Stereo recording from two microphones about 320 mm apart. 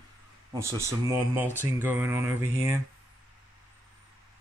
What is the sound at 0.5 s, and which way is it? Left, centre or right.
Speech, centre.